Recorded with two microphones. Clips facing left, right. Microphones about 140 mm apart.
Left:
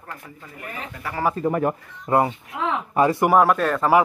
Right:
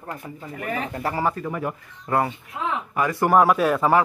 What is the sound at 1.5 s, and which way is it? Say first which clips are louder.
Speech: left 6 dB; 50° left (ahead or behind).